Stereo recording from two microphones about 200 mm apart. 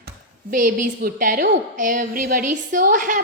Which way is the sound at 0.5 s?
40° right (ahead or behind).